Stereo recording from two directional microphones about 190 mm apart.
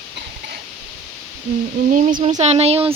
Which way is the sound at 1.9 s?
45° right (ahead or behind).